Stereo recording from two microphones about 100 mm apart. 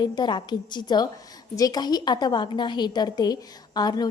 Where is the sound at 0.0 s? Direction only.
50° left (ahead or behind).